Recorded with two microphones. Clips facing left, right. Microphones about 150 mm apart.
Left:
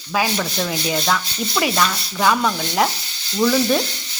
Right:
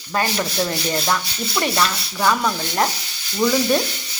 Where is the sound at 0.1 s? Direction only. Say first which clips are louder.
Left 1 dB; 5° left (ahead or behind).